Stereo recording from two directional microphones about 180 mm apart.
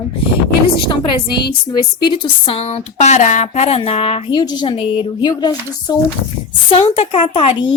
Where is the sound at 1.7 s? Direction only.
25° left (ahead or behind).